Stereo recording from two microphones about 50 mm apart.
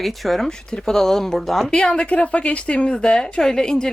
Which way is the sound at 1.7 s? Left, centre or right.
Centre.